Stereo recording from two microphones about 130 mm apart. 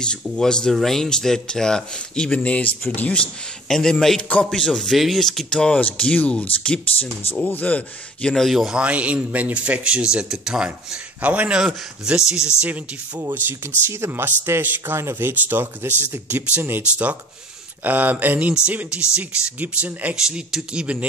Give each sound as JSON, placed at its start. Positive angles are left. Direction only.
{"t": 0.0, "sound": "a man's voice", "side_deg": 5}
{"t": 13.8, "sound": "speech", "side_deg": -20}